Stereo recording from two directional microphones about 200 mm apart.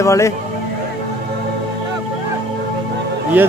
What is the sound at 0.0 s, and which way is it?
Speech, 15° left (ahead or behind).